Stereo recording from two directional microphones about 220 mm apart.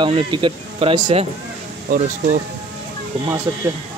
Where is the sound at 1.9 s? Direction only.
35° right (ahead or behind).